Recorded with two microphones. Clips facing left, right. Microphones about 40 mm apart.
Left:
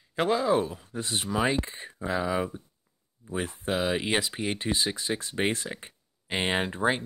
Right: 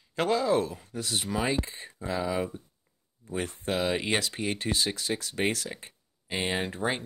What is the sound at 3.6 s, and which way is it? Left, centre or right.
Speech, centre.